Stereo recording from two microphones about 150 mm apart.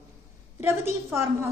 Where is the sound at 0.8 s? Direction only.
20° right (ahead or behind).